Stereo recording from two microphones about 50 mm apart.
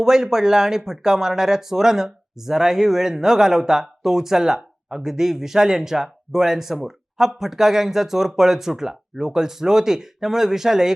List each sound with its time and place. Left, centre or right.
0.0 s speech: centre